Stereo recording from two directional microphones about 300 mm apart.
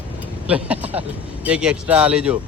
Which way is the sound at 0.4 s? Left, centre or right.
Centre.